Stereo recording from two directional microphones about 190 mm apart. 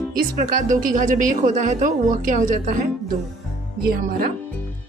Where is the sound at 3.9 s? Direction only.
50° right (ahead or behind).